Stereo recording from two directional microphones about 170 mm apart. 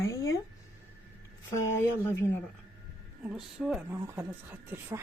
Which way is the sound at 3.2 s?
5° right (ahead or behind).